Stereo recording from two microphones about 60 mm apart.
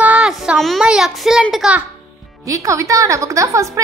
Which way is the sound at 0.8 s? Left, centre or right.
Centre.